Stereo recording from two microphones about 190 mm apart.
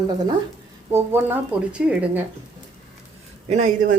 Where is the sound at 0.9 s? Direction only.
10° right (ahead or behind).